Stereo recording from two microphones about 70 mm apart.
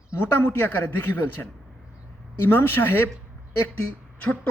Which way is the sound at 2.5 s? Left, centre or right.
Left.